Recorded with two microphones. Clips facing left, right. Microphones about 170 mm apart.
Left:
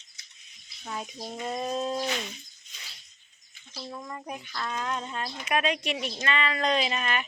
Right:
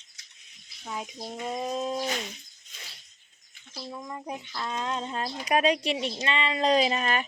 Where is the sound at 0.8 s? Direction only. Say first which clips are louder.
Even; 10° right (ahead or behind).